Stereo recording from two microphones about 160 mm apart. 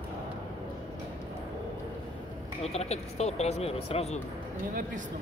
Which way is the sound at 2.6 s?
40° left (ahead or behind).